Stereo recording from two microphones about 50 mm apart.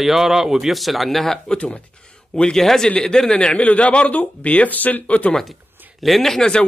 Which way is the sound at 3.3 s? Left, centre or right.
Left.